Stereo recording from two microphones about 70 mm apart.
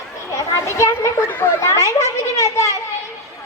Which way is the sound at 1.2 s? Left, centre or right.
Left.